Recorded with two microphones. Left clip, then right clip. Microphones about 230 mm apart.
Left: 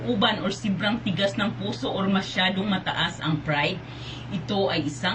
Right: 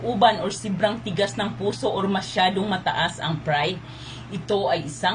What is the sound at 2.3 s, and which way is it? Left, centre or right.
Speech, right.